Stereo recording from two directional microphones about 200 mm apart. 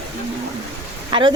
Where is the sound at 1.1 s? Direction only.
25° right (ahead or behind).